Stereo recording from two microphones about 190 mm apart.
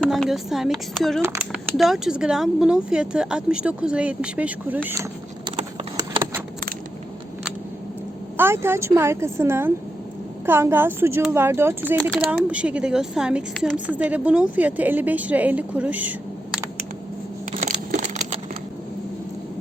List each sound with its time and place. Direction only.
0.0 s speech: centre (ahead or behind)
1.2 s speech: 15° right (ahead or behind)
1.6 s speech: centre (ahead or behind)
8.4 s speech: 10° right (ahead or behind)
17.5 s a sound: 40° right (ahead or behind)